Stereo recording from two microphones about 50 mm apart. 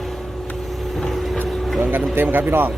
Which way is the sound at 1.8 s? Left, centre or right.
Right.